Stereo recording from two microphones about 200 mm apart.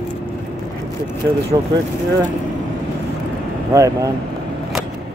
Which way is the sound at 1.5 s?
25° right (ahead or behind).